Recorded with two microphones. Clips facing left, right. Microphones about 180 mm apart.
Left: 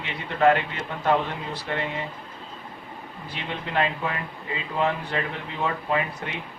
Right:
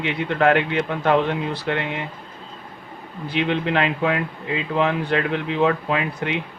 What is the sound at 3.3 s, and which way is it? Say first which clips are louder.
Speech: right 7 dB; 75° right (ahead or behind).